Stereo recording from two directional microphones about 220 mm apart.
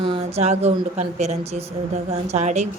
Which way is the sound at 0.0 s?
25° right (ahead or behind).